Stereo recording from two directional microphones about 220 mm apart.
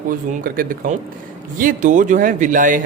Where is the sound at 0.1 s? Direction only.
40° right (ahead or behind).